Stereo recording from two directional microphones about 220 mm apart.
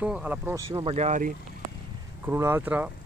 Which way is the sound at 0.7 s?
25° right (ahead or behind).